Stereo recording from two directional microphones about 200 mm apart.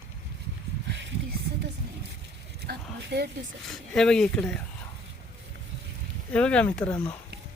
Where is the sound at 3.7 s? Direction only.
5° left (ahead or behind).